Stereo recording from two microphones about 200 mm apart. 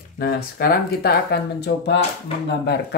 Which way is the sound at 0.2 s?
50° left (ahead or behind).